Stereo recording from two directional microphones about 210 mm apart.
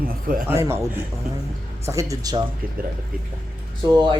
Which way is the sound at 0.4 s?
10° right (ahead or behind).